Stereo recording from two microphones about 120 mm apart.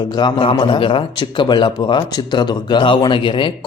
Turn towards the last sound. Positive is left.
turn(degrees=45)  # may be behind; listen again after turning